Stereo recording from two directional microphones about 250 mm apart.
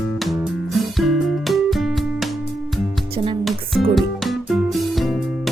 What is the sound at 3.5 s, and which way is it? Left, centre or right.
Music, centre.